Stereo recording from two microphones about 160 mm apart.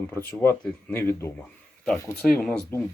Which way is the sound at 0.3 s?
15° left (ahead or behind).